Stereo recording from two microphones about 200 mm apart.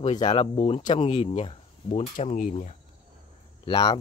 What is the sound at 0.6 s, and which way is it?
Speech, 35° left (ahead or behind).